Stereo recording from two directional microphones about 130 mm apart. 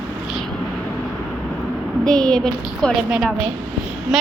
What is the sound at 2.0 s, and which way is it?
Speech, 5° left (ahead or behind).